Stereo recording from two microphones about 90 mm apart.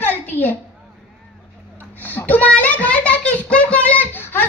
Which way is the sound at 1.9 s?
20° left (ahead or behind).